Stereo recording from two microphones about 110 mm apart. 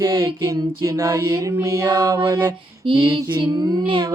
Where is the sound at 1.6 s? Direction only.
30° right (ahead or behind).